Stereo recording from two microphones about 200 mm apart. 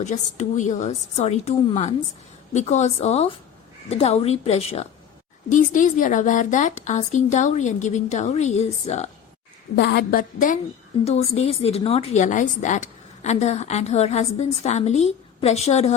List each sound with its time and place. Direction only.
0.0 s a woman's voice: 35° left (ahead or behind)
9.7 s a woman's voice: 60° left (ahead or behind); by 10.6 s 45° left (ahead or behind)
11.0 s a woman's voice: 30° left (ahead or behind)